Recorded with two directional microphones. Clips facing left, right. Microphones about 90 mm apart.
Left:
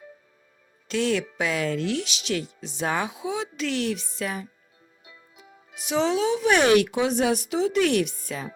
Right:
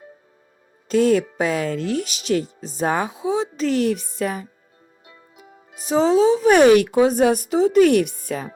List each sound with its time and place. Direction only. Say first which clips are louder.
0.9 s speech: right 8 dB; 40° right (ahead or behind)
5.0 s music: right 4 dB; 45° right (ahead or behind)
6.6 s speech: right 7 dB; 45° right (ahead or behind)